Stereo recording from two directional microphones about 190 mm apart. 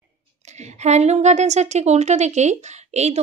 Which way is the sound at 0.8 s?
35° right (ahead or behind).